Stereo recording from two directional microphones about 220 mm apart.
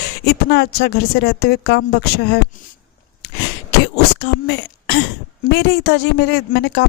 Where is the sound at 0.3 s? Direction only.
50° left (ahead or behind).